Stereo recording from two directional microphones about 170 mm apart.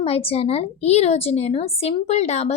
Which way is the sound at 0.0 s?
35° left (ahead or behind).